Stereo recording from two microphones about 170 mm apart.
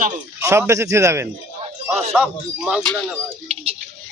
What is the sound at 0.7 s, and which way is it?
Speech, 15° right (ahead or behind).